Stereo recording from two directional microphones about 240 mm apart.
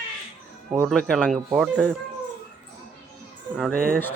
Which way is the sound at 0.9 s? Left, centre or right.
Centre.